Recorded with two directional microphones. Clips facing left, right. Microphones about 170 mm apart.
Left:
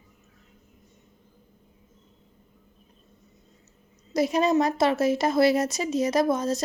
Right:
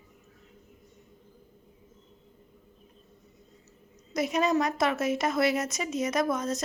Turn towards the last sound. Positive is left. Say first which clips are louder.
# left 5 dB
turn(degrees=30)  # may be behind; listen again after turning